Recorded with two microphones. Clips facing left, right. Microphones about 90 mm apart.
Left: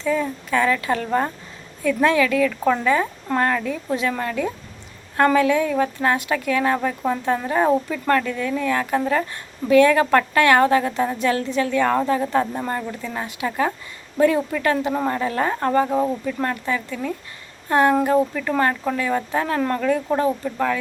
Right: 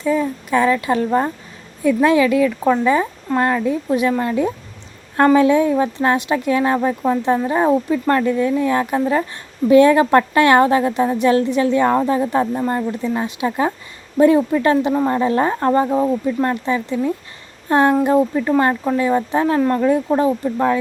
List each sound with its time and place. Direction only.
0.0 s a woman's voice: 15° right (ahead or behind)